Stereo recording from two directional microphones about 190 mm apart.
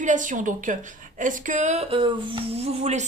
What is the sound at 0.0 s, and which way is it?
A woman's voice, 40° right (ahead or behind).